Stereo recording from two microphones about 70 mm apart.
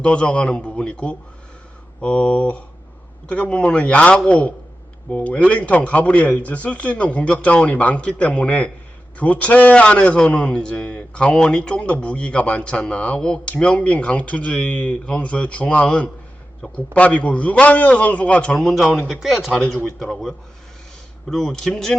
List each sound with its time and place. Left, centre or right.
0.0 s a man's voice: centre